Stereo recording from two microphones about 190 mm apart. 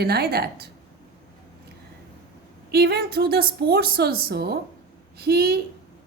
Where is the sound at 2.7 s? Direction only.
55° right (ahead or behind).